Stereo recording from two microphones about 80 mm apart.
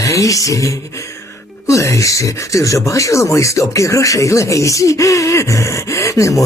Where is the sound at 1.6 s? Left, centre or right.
Left.